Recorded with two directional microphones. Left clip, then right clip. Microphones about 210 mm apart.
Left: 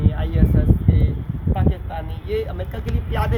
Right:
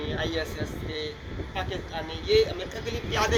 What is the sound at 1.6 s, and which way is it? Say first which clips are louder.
Speech: left 4 dB; centre (ahead or behind).